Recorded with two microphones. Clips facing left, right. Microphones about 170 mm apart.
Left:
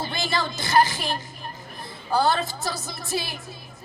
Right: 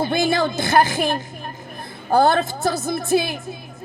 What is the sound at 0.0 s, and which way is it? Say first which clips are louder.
A woman's voice: right 8 dB; 55° right (ahead or behind).